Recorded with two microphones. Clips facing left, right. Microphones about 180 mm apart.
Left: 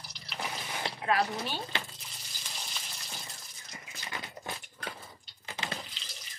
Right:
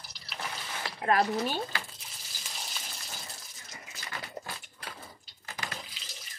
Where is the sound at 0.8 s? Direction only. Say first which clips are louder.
Left 3 dB; 25° left (ahead or behind).